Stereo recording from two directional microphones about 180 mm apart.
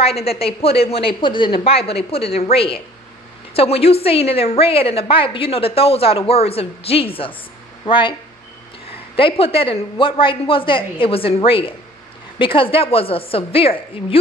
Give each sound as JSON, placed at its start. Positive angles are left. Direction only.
{"t": 0.0, "sound": "a woman's voice", "side_deg": 35}